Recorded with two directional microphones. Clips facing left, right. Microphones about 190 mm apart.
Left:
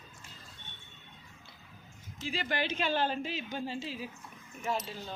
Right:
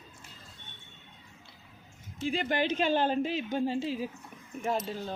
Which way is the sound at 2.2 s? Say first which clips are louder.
Right 5 dB; 50° right (ahead or behind).